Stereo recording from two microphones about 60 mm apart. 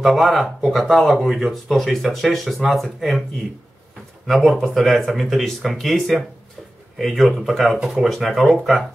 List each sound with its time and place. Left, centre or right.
0.0 s speech: centre
4.3 s speech: centre